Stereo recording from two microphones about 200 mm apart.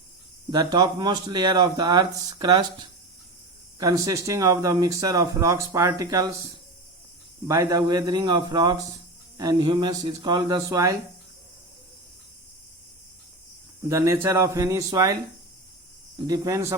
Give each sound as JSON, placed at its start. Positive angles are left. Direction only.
{"t": 0.5, "sound": "speech", "side_deg": -20}
{"t": 7.4, "sound": "speech", "side_deg": -15}
{"t": 13.8, "sound": "speech", "side_deg": -15}
{"t": 16.1, "sound": "speech", "side_deg": -20}